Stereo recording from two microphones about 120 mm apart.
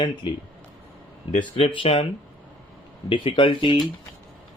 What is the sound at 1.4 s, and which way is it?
Speech, 45° left (ahead or behind).